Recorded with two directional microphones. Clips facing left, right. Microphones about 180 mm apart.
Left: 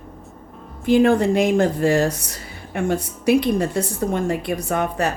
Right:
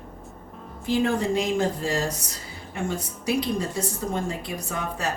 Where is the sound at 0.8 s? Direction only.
60° left (ahead or behind).